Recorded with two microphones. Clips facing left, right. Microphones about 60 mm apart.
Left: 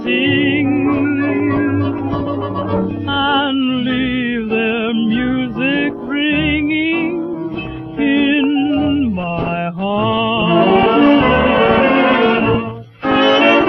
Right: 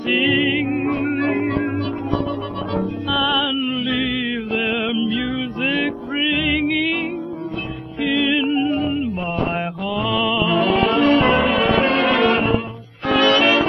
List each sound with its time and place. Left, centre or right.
0.1 s music: centre
3.3 s music: centre
6.6 s music: centre
8.0 s music: centre
13.1 s brass instrument: centre